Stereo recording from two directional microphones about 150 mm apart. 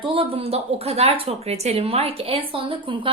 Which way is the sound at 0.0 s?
40° right (ahead or behind).